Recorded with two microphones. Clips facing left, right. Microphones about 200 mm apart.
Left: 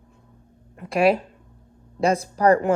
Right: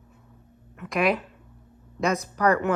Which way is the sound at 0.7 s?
30° left (ahead or behind).